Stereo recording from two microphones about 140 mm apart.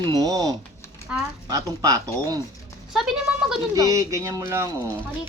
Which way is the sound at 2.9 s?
Centre (ahead or behind).